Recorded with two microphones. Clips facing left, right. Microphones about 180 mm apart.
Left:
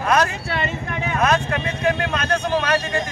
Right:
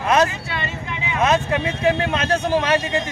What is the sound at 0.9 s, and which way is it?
Vehicle, 45° left (ahead or behind).